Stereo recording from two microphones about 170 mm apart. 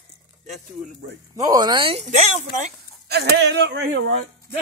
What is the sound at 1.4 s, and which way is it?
Speech, 20° right (ahead or behind).